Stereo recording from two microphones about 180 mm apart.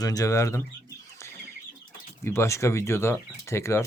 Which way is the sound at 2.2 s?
15° left (ahead or behind).